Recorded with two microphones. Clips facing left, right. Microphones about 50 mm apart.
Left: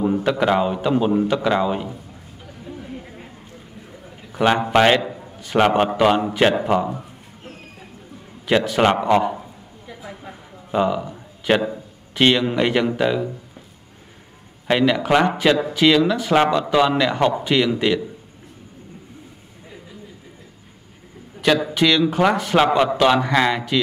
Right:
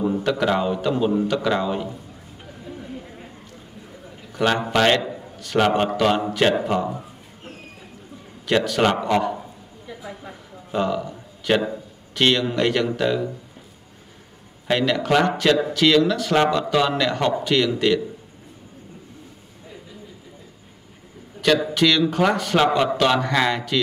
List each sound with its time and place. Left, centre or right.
0.0 s a man's voice: centre
2.6 s chatter: centre
2.9 s a sound: centre
4.3 s a man's voice: centre
8.5 s a man's voice: centre
10.0 s a sound: centre
12.2 s a man's voice: centre
14.7 s a man's voice: centre
21.4 s a man's voice: centre